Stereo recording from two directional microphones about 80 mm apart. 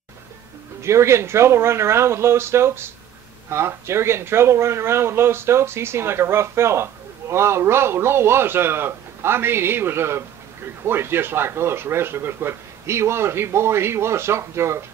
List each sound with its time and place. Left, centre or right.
0.8 s speech: right